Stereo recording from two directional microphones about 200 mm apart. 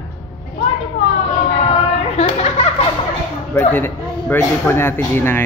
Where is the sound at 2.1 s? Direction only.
35° left (ahead or behind).